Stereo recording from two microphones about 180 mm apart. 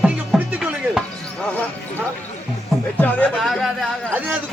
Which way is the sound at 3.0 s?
10° left (ahead or behind).